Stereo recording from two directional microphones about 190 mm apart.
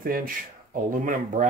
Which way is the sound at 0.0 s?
50° right (ahead or behind).